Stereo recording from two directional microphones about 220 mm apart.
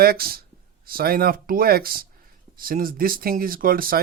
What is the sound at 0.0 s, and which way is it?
Speech, 45° right (ahead or behind).